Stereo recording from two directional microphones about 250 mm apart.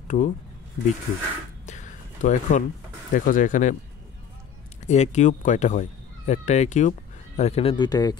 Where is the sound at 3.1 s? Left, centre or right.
Left.